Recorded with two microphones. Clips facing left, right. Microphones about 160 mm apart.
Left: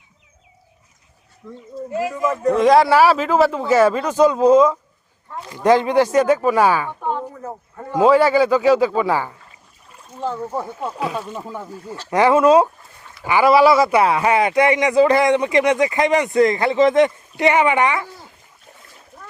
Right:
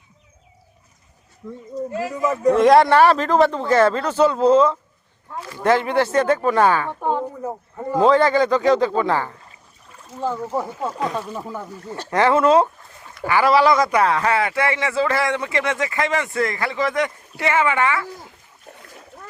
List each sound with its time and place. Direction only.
1.4 s speech: 15° right (ahead or behind)
1.9 s speech: 15° left (ahead or behind)
2.5 s speech: centre (ahead or behind)
7.0 s speech: 15° right (ahead or behind)
7.9 s speech: 10° left (ahead or behind)
10.0 s speech: centre (ahead or behind)
12.1 s speech: 15° left (ahead or behind)